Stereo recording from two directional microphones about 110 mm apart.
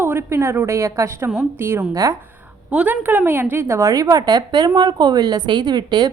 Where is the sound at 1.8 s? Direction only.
35° right (ahead or behind).